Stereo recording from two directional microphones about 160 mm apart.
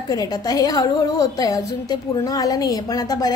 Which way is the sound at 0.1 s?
20° left (ahead or behind).